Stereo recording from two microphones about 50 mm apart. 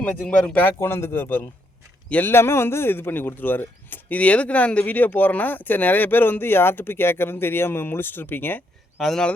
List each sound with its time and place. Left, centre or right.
0.0 s speech: left
0.8 s speech: left
4.2 s speech: left
9.0 s speech: centre